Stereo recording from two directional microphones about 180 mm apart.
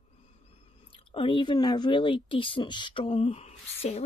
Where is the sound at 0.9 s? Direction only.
30° left (ahead or behind).